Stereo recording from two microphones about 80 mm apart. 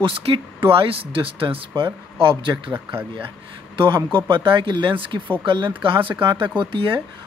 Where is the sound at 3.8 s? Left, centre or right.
Right.